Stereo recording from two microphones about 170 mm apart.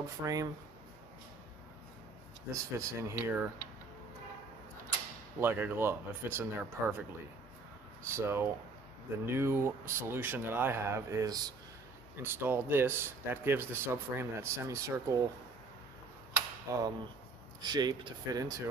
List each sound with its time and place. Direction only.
0.2 s speech: 20° right (ahead or behind)
2.5 s speech: 15° right (ahead or behind)
5.4 s speech: 10° right (ahead or behind)
16.7 s speech: 20° right (ahead or behind)